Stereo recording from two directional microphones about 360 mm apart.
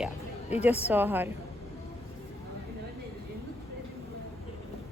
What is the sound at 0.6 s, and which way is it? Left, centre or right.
Speech, centre.